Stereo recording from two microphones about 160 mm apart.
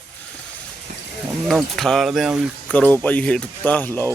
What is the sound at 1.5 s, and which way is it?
Speech, centre (ahead or behind).